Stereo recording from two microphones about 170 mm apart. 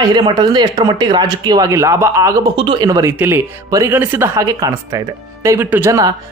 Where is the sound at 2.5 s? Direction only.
30° right (ahead or behind).